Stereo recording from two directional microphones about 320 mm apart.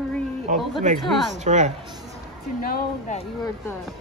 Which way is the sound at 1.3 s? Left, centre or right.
Right.